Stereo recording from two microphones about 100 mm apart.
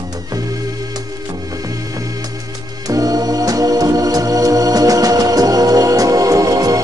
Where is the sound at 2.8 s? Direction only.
40° right (ahead or behind).